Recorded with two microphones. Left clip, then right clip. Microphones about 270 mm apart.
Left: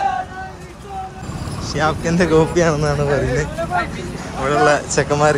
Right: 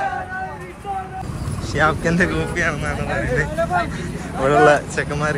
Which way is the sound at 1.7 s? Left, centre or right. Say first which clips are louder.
Right 1 dB; centre.